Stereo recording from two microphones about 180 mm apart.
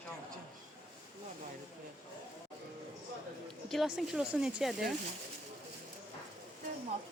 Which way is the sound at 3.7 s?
Centre (ahead or behind).